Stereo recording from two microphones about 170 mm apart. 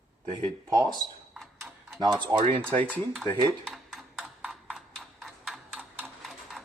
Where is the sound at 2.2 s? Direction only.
30° right (ahead or behind).